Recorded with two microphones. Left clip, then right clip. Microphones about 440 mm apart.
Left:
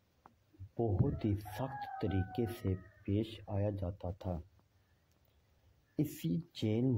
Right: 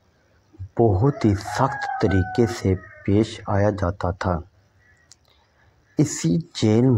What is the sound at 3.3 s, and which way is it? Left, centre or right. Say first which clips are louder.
Speech: right 18 dB; left.